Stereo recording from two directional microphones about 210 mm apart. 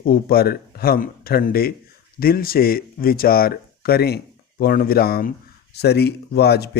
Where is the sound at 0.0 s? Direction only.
45° left (ahead or behind).